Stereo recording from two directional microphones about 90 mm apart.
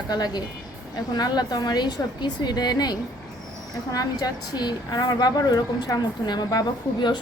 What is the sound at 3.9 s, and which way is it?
A woman's voice, 45° left (ahead or behind).